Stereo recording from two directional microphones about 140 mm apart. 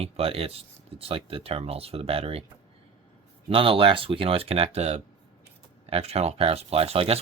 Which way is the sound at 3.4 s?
40° right (ahead or behind).